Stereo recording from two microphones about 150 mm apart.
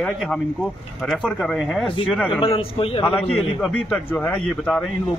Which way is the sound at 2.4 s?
40° left (ahead or behind).